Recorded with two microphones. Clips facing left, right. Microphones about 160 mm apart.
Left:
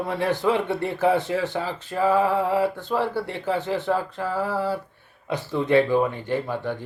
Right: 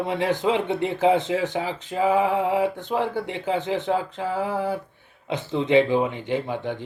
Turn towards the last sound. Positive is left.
turn(degrees=-20)  # may be behind; listen again after turning